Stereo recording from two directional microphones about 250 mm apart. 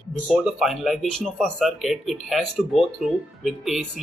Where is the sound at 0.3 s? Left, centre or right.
Centre.